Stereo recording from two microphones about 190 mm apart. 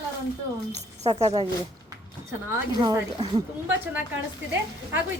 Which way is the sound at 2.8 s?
20° right (ahead or behind).